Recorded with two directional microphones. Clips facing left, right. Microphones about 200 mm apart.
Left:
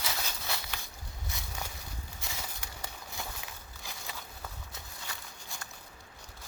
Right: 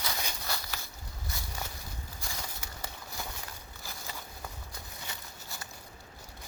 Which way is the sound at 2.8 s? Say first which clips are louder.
Right 1 dB; centre (ahead or behind).